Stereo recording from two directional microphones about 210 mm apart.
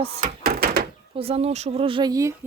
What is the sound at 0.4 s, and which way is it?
Door, 45° right (ahead or behind).